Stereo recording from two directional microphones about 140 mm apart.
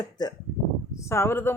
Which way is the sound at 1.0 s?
20° left (ahead or behind).